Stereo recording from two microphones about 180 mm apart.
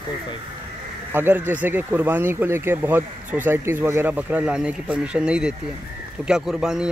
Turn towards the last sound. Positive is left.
turn(degrees=-5)  # may be behind; listen again after turning